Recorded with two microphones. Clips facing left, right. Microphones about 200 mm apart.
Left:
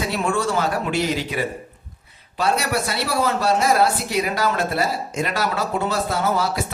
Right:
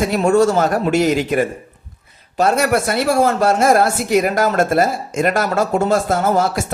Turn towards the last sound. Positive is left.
turn(degrees=-50)  # may be behind; listen again after turning